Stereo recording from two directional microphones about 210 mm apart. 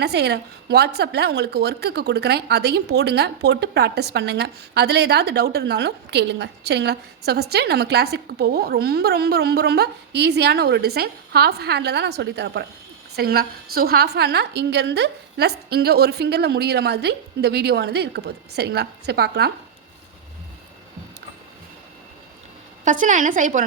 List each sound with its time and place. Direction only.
0.0 s a woman's voice: 50° right (ahead or behind)
22.8 s a woman's voice: 35° right (ahead or behind)